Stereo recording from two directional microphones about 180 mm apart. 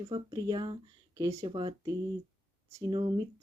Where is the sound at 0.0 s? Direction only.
20° right (ahead or behind).